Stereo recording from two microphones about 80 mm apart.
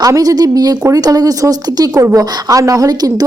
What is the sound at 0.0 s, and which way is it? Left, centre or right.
Speech, right.